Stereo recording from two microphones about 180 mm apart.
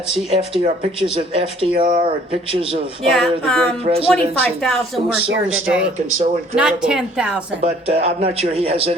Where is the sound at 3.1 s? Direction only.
Centre (ahead or behind).